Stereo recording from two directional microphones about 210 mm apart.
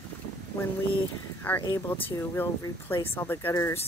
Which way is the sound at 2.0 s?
15° left (ahead or behind).